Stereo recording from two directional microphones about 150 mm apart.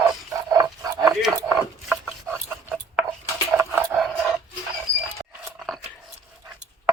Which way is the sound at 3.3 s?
20° right (ahead or behind).